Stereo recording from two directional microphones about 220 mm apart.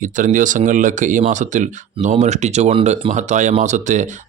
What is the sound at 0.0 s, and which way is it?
Speech, 35° right (ahead or behind).